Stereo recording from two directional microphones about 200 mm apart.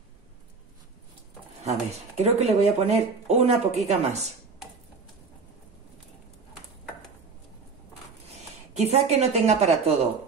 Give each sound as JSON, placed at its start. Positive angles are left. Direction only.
{"t": 1.6, "sound": "speech", "side_deg": -30}
{"t": 8.7, "sound": "speech", "side_deg": -35}